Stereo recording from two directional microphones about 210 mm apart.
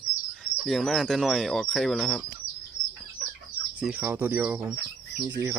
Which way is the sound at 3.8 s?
5° right (ahead or behind).